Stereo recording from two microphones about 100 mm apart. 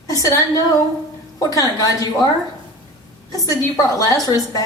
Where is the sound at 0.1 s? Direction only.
35° left (ahead or behind).